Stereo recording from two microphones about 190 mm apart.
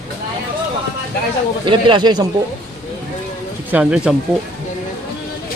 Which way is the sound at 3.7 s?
5° right (ahead or behind).